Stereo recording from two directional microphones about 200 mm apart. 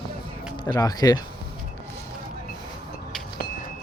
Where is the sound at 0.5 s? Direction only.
20° left (ahead or behind).